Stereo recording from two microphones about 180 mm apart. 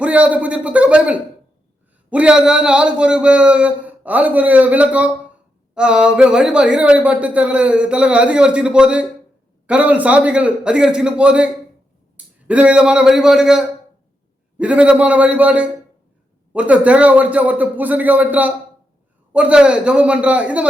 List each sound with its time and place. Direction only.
0.0 s a man's voice: 5° right (ahead or behind)